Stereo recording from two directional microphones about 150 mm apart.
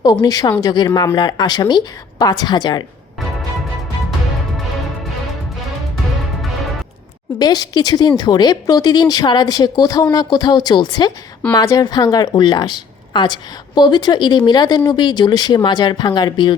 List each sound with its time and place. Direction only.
0.0 s a woman's voice: 25° left (ahead or behind)
7.3 s a woman's voice: 25° left (ahead or behind)